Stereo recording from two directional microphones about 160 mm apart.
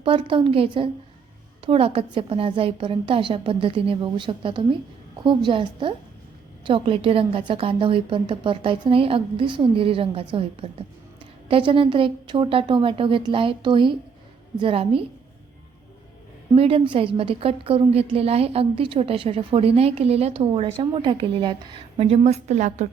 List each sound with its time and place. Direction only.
0.0 s a woman's voice: 30° right (ahead or behind)
16.6 s a woman's voice: 35° right (ahead or behind)